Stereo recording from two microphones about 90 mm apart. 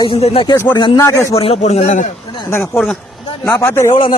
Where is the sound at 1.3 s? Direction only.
90° left.